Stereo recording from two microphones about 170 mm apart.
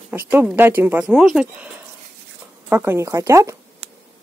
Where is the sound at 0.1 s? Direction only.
10° right (ahead or behind).